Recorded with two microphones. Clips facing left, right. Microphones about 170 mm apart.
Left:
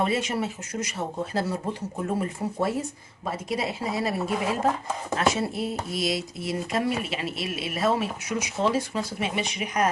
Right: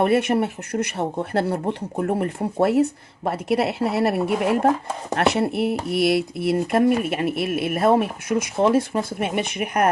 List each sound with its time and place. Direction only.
0.0 s speech: 60° right (ahead or behind)